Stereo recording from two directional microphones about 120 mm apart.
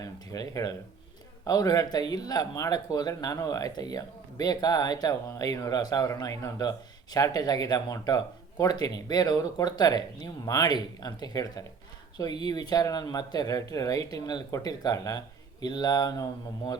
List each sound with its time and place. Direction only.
0.0 s speech: 30° left (ahead or behind)